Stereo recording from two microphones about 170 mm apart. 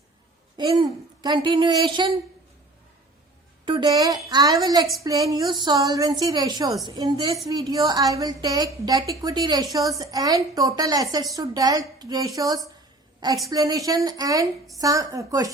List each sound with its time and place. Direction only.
0.5 s a woman's voice: 25° right (ahead or behind)
3.7 s a woman's voice: 25° right (ahead or behind)